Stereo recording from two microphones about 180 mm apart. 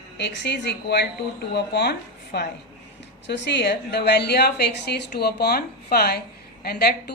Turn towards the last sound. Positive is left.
turn(degrees=60)  # may be behind; listen again after turning